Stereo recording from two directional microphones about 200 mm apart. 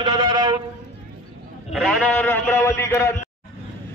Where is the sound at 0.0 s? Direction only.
25° right (ahead or behind).